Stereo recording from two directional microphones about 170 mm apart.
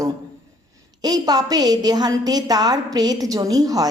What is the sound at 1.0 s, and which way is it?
A woman's voice, 20° right (ahead or behind).